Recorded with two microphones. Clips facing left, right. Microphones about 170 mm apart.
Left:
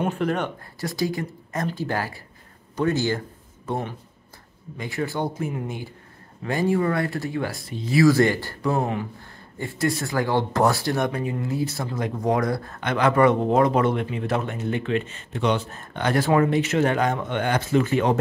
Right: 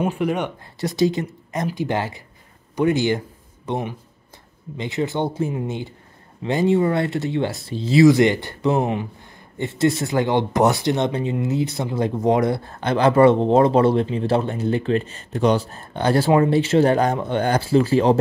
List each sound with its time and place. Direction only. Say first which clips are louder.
0.0 s speech: right 2 dB; 10° right (ahead or behind); by 18.2 s 30° right (ahead or behind)